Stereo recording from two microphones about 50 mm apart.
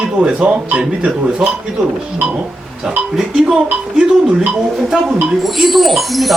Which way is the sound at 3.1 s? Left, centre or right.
Centre.